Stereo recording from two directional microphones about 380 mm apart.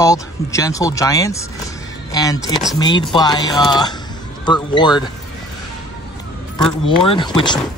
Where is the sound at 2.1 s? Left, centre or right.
Centre.